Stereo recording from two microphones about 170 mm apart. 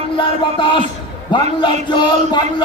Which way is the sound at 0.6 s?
30° left (ahead or behind).